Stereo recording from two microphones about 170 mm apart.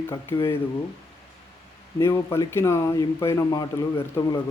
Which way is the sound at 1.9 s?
15° left (ahead or behind).